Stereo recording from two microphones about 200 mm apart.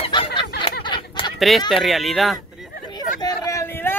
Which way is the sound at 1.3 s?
Centre (ahead or behind).